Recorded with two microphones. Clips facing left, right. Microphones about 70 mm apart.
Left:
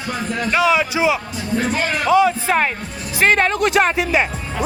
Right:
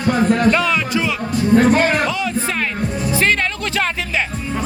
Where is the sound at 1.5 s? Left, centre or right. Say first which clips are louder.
Right 6 dB; right.